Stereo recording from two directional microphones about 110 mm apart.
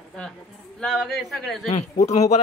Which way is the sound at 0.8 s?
5° left (ahead or behind).